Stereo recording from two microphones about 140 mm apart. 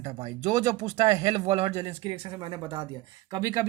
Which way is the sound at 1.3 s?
45° right (ahead or behind).